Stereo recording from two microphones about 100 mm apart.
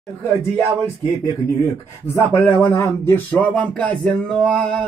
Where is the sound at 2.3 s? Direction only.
20° left (ahead or behind).